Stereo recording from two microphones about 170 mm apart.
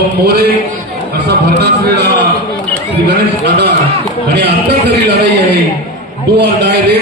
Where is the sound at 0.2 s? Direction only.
65° right (ahead or behind).